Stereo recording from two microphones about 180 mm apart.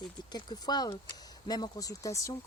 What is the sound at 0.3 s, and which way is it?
Speech, 25° left (ahead or behind).